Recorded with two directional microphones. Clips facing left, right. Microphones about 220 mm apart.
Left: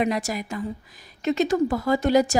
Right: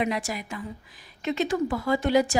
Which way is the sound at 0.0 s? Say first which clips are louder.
Left 3 dB; 40° left (ahead or behind).